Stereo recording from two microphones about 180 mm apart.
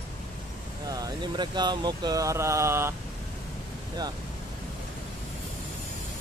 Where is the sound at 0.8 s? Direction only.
20° right (ahead or behind).